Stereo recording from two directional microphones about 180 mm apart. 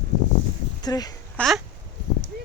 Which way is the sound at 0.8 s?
20° left (ahead or behind).